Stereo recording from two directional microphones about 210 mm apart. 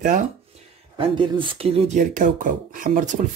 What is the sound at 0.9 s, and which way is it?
Speech, 25° right (ahead or behind).